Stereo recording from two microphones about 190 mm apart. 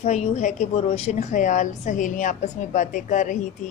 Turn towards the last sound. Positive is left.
turn(degrees=40)  # may be behind; listen again after turning